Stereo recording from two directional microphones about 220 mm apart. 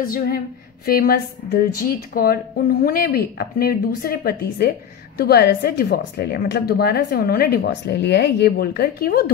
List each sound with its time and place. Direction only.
0.0 s a woman's voice: 40° left (ahead or behind)